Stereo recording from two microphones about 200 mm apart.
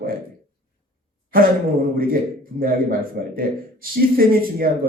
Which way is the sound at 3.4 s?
45° right (ahead or behind).